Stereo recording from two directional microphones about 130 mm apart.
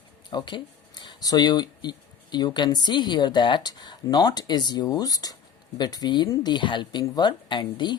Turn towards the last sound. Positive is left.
turn(degrees=35)  # may be behind; listen again after turning